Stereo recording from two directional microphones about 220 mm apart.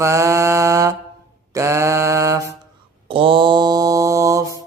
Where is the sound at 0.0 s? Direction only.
15° right (ahead or behind).